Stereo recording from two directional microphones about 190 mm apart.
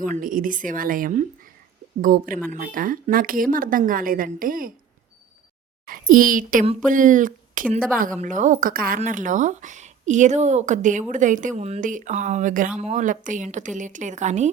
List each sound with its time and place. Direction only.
0.0 s speech: 45° right (ahead or behind)
5.8 s speech: 45° right (ahead or behind)